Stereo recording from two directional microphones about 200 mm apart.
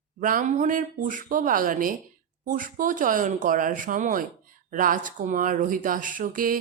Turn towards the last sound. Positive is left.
turn(degrees=-45)  # may be behind; listen again after turning